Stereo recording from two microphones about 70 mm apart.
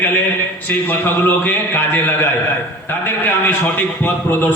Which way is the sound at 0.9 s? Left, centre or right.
Left.